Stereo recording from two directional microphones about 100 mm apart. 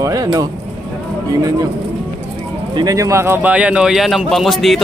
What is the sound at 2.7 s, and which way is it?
A man's voice, 40° right (ahead or behind).